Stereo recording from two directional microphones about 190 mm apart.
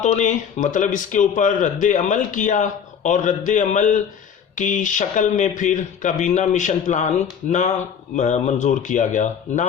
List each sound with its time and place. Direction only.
0.0 s a man's voice: 40° left (ahead or behind)
8.1 s a man's voice: 40° left (ahead or behind)